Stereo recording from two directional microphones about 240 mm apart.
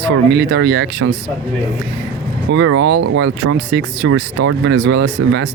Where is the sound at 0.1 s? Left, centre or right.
Right.